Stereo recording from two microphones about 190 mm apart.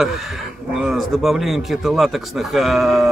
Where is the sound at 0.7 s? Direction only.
Centre (ahead or behind).